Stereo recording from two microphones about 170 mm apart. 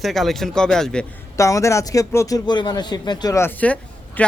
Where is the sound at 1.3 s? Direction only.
20° left (ahead or behind).